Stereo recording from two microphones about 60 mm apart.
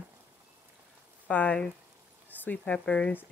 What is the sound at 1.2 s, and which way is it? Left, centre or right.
Speech, left.